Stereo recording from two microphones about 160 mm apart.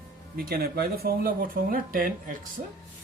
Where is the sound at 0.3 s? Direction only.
70° right (ahead or behind).